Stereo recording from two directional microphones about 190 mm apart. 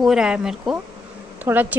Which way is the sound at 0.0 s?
5° right (ahead or behind).